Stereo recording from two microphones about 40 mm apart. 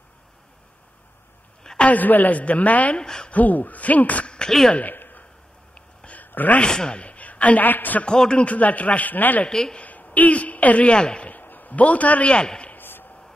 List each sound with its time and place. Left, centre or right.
1.8 s a woman's voice: left
3.0 s speech: centre
3.3 s a woman's voice: left
4.5 s speech: centre
4.9 s a sound: left
6.6 s speech: centre
7.0 s a sound: left
7.6 s a man's voice: left
8.3 s a woman's voice: left
9.5 s speech: centre
9.8 s speech: left
11.2 s a sound: left
12.3 s speech: left
12.7 s a sound: left